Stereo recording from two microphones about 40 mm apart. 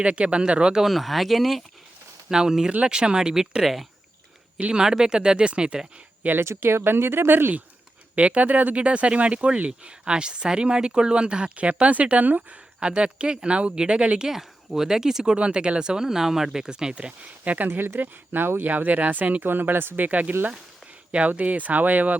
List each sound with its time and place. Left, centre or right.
0.0 s speech: right
0.9 s speech: centre
2.3 s speech: centre
4.7 s speech: centre
6.4 s speech: right
8.1 s speech: right
12.8 s speech: right
14.2 s speech: centre
17.2 s speech: right
17.7 s speech: right
18.0 s speech: right
18.6 s speech: right
19.5 s speech: right
20.1 s speech: right